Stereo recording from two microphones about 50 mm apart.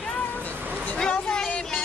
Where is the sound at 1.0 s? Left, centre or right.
Centre.